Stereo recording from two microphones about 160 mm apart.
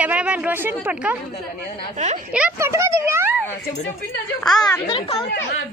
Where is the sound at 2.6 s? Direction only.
20° right (ahead or behind).